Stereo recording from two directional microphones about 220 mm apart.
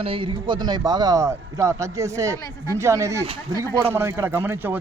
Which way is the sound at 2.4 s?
15° left (ahead or behind).